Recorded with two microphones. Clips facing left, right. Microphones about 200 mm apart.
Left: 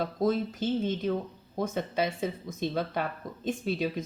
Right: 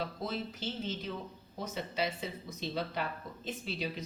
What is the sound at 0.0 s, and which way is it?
Speech, 50° left (ahead or behind).